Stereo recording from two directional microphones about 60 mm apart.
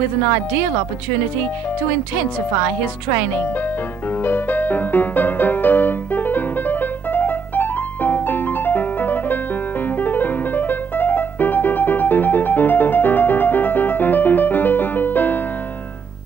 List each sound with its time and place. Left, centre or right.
4.1 s music: left